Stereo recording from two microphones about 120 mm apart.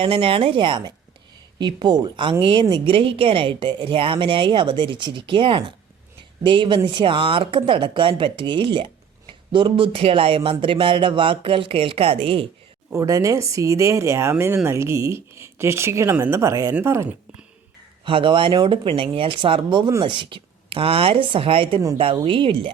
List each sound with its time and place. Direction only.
0.0 s speech: 50° right (ahead or behind)
12.9 s speech: 30° right (ahead or behind)
16.4 s speech: 25° right (ahead or behind)
18.0 s speech: 45° right (ahead or behind)